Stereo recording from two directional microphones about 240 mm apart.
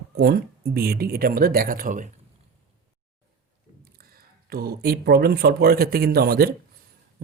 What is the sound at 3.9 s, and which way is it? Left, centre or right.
Speech, right.